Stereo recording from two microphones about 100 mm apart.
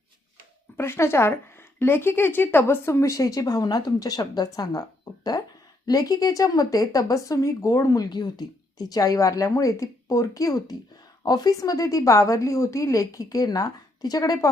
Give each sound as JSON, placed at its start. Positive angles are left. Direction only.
{"t": 0.8, "sound": "speech", "side_deg": 25}
{"t": 5.8, "sound": "a woman's voice", "side_deg": 40}
{"t": 8.1, "sound": "a woman's voice", "side_deg": 45}